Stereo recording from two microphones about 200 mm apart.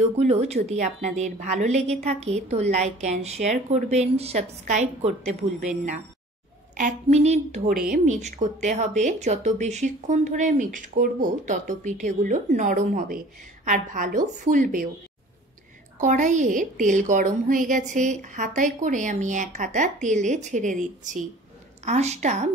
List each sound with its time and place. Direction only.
0.2 s a woman's voice: 35° right (ahead or behind)
16.0 s a woman's voice: 40° right (ahead or behind)